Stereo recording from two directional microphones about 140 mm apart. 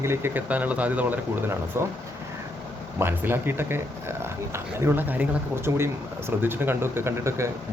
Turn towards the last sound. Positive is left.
turn(degrees=-20)  # may be behind; listen again after turning